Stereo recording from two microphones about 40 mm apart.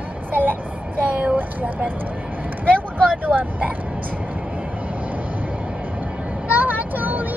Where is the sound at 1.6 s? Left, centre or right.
Right.